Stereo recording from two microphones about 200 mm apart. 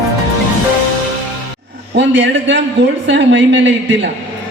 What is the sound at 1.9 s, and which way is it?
A man's voice, 65° right (ahead or behind).